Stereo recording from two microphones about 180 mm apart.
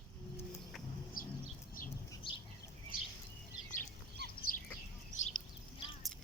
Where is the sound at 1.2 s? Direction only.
50° left (ahead or behind).